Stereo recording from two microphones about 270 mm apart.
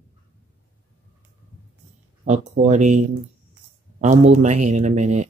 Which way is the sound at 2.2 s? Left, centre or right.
Right.